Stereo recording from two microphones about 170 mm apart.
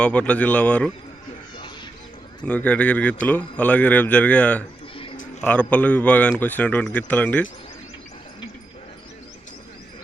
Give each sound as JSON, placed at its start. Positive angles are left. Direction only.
{"t": 0.0, "sound": "a man's voice", "side_deg": 5}
{"t": 2.4, "sound": "a man's voice", "side_deg": 5}
{"t": 5.1, "sound": "a sound", "side_deg": 50}
{"t": 5.4, "sound": "a man's voice", "side_deg": 10}